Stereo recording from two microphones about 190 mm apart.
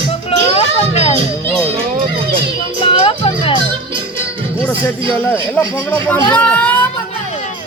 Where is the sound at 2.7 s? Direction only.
25° left (ahead or behind).